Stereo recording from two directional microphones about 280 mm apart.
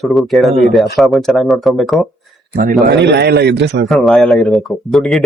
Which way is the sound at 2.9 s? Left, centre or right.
Right.